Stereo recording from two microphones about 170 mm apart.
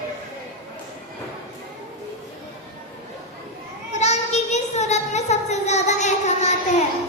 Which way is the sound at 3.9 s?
40° left (ahead or behind).